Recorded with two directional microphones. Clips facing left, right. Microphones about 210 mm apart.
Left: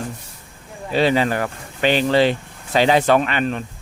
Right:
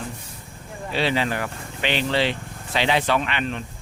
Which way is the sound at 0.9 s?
45° left (ahead or behind).